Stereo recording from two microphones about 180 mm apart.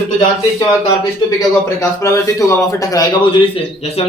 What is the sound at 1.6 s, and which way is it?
A man's voice, 15° left (ahead or behind).